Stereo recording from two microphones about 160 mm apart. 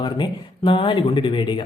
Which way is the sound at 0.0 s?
30° left (ahead or behind).